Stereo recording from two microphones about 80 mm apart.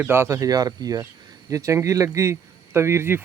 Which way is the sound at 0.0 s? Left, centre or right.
Right.